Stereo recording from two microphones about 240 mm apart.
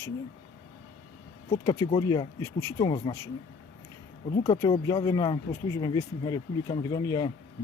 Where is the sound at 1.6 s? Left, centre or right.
Centre.